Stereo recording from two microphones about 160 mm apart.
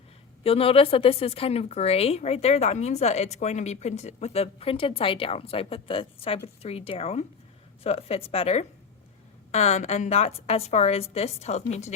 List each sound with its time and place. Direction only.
0.4 s a woman's voice: 35° left (ahead or behind)